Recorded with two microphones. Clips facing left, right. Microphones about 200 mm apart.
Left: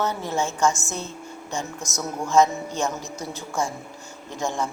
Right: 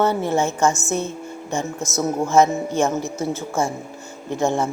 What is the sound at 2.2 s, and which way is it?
Speech, 25° right (ahead or behind).